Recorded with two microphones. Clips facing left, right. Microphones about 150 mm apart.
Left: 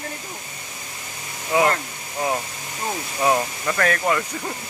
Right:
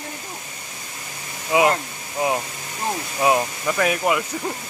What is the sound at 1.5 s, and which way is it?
Speech, 15° right (ahead or behind).